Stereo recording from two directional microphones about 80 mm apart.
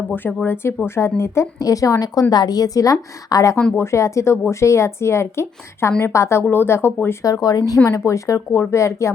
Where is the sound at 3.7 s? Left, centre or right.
Left.